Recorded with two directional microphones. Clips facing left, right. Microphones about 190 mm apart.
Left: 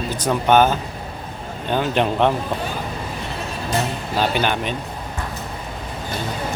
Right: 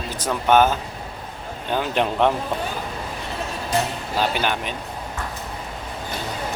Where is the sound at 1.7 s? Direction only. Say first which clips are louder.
Left 2 dB; 5° right (ahead or behind).